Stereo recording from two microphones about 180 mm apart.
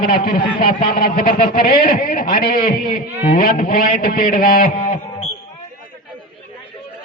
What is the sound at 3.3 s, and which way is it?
A man's voice, 50° left (ahead or behind).